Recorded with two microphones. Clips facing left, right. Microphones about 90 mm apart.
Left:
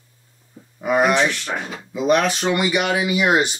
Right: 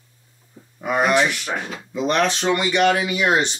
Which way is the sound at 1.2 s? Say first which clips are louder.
Even; 10° right (ahead or behind).